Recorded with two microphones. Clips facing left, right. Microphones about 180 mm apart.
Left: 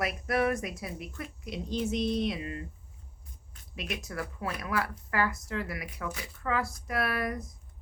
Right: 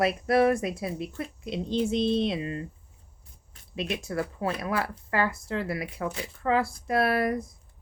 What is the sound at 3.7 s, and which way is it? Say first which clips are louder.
Speech: right 7 dB; 30° right (ahead or behind).